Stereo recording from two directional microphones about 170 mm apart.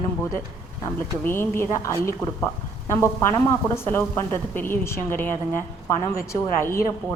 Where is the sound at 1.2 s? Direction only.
15° left (ahead or behind).